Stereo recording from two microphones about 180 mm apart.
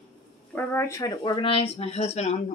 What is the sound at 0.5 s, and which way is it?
Speech, 15° left (ahead or behind).